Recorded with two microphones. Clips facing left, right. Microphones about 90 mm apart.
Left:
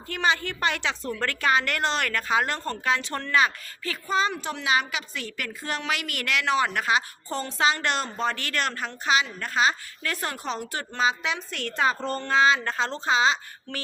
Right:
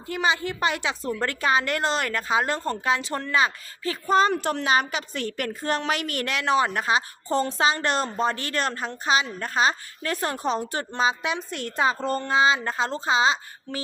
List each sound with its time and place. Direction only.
0.1 s a woman's voice: 15° right (ahead or behind)
4.0 s a woman's voice: 45° right (ahead or behind); by 11.9 s 20° right (ahead or behind)
11.9 s a sound: 15° right (ahead or behind)